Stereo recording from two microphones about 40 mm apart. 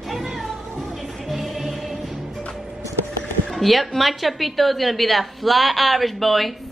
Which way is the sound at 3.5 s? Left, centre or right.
Centre.